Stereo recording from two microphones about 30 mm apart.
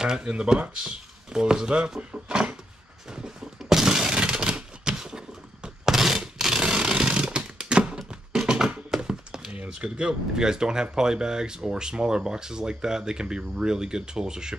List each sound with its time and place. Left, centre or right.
0.0 s speech: right
3.6 s a sound: centre
5.9 s a sound: centre
6.6 s chainsaw: right
8.3 s music: centre
9.9 s speech: right